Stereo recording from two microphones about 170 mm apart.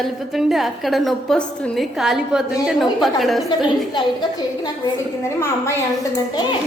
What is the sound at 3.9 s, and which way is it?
A woman's voice, 25° left (ahead or behind).